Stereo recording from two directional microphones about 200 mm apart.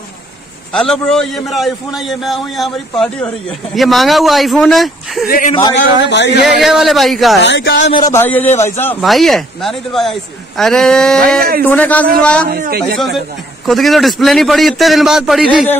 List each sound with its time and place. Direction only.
0.7 s a man's voice: centre (ahead or behind)
5.2 s a man's voice: 45° left (ahead or behind)
6.0 s speech: 60° left (ahead or behind)
6.4 s a man's voice: centre (ahead or behind)
7.4 s speech: 60° left (ahead or behind)
7.9 s a man's voice: 15° left (ahead or behind)
9.0 s a man's voice: centre (ahead or behind)
12.4 s a man's voice: 45° right (ahead or behind)
12.9 s a man's voice: centre (ahead or behind)